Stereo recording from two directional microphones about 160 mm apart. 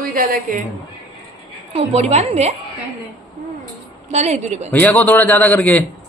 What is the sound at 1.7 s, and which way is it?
Speech, 40° right (ahead or behind).